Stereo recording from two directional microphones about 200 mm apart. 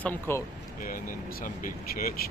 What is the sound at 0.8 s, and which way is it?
Speech, 45° left (ahead or behind).